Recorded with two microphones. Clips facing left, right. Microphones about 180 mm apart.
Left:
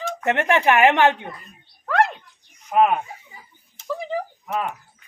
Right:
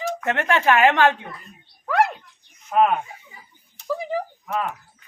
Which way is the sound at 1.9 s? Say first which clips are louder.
Even; 5° right (ahead or behind).